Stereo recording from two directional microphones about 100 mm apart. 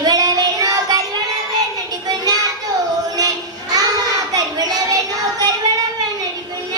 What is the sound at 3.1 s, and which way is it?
Child singing, 40° right (ahead or behind).